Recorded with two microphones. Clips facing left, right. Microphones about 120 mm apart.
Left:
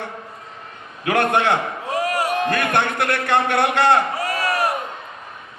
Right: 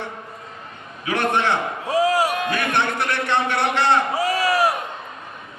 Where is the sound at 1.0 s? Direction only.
55° left (ahead or behind).